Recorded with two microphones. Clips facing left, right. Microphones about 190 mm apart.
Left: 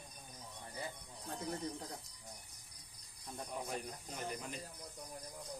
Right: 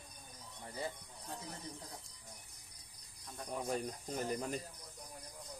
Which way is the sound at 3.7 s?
40° right (ahead or behind).